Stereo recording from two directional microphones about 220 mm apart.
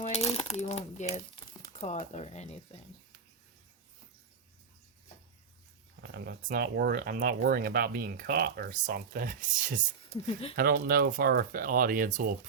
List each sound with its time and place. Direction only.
0.0 s coin: 25° left (ahead or behind)
1.8 s speech: 30° left (ahead or behind)
6.0 s speech: 50° right (ahead or behind)